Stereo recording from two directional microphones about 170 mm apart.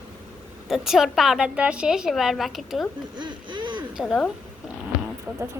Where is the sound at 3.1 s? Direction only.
25° right (ahead or behind).